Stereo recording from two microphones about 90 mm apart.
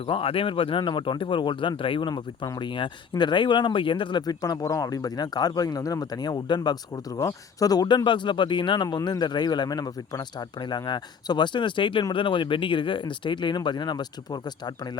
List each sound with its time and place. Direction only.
0.1 s speech: 90° left; by 4.2 s 65° left (ahead or behind)
4.3 s speech: 45° left (ahead or behind)